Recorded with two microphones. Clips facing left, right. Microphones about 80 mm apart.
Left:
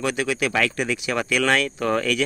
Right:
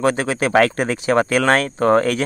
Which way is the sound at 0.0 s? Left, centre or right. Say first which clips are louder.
Right 5 dB; right.